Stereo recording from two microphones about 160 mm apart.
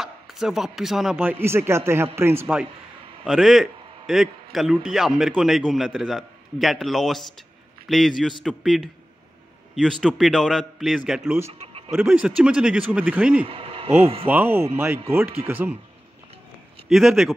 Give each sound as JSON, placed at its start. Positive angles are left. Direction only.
{"t": 0.0, "sound": "speech", "side_deg": 0}
{"t": 3.3, "sound": "a man's voice", "side_deg": 0}
{"t": 11.4, "sound": "a sound", "side_deg": -35}
{"t": 11.9, "sound": "a man's voice", "side_deg": -5}
{"t": 13.5, "sound": "speech", "side_deg": -35}
{"t": 14.2, "sound": "speech", "side_deg": -15}
{"t": 16.9, "sound": "a man's voice", "side_deg": 0}